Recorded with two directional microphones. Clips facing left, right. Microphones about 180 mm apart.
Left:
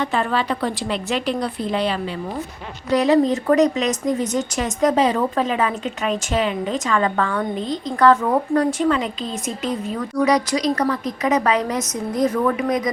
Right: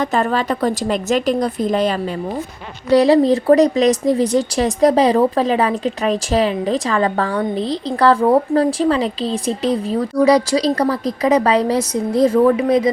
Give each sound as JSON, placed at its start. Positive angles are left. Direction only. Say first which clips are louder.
{"t": 0.0, "sound": "a woman's voice", "louder": "right 3 dB", "side_deg": -45}
{"t": 2.9, "sound": "speech", "louder": "right 5 dB", "side_deg": -35}